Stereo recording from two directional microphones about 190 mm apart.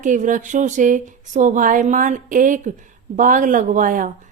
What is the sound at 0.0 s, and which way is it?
A woman's voice, 40° right (ahead or behind).